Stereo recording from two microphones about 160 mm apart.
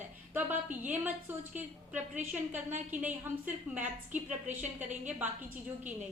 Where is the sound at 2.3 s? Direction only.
10° right (ahead or behind).